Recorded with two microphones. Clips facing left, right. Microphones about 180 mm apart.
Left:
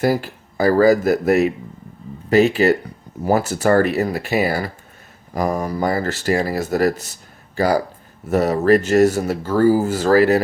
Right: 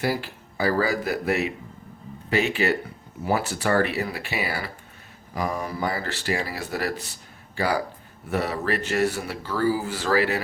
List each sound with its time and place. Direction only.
0.0 s speech: 45° left (ahead or behind)